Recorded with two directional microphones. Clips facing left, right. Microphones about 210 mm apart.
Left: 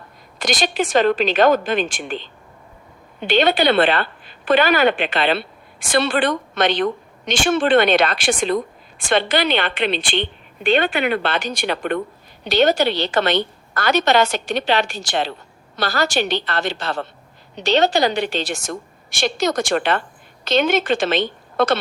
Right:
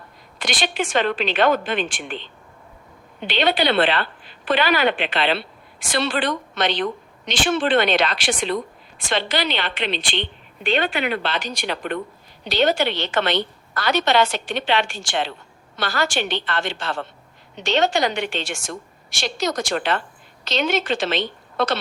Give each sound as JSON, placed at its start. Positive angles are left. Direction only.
{"t": 0.3, "sound": "a woman's voice", "side_deg": 40}
{"t": 12.5, "sound": "a woman's voice", "side_deg": 45}